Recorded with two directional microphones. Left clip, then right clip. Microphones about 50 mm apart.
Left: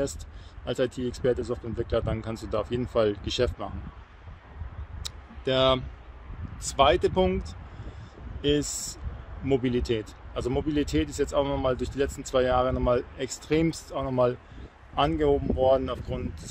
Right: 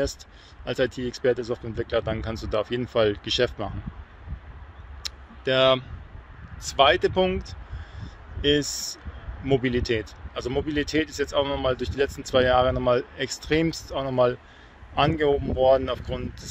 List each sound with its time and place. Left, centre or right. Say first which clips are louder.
0.7 s speech: right 2 dB; centre
5.0 s a sound: right 4 dB; centre
5.4 s speech: right 3 dB; left
8.0 s a sound: right 4 dB; centre
9.6 s speech: right 2 dB; centre; by 14.1 s left
14.1 s speech: right 3 dB; centre
15.0 s speech: right 2 dB; centre